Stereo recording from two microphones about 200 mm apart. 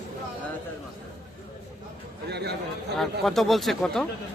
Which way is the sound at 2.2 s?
55° right (ahead or behind).